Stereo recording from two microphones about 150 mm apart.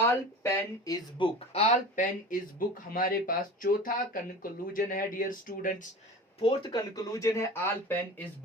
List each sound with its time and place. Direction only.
0.0 s speech: 15° left (ahead or behind)
1.5 s speech: 50° left (ahead or behind); by 5.7 s 65° left (ahead or behind)
6.4 s speech: 30° left (ahead or behind); by 8.3 s 15° left (ahead or behind)